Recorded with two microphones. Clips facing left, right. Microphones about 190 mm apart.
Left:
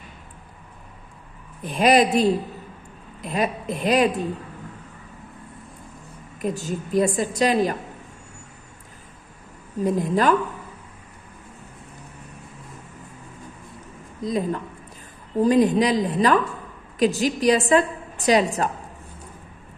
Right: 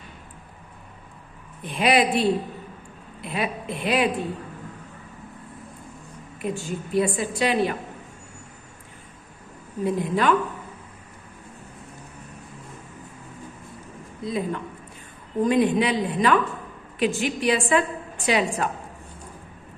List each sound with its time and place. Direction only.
1.6 s a woman's voice: 40° left (ahead or behind)
6.4 s a woman's voice: 40° left (ahead or behind)
9.8 s a woman's voice: 40° left (ahead or behind)
14.2 s a woman's voice: 40° left (ahead or behind)